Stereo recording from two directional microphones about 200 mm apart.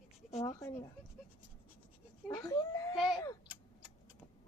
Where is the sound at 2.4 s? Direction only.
15° left (ahead or behind).